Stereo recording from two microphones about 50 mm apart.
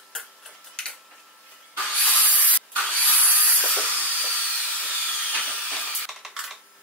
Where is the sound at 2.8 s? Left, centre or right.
Right.